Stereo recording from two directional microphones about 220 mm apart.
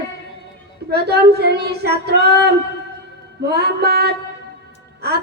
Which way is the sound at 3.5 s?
45° right (ahead or behind).